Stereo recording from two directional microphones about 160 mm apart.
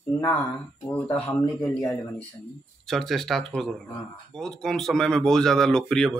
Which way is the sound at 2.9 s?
Centre (ahead or behind).